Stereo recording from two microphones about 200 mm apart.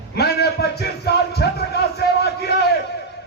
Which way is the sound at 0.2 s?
55° left (ahead or behind).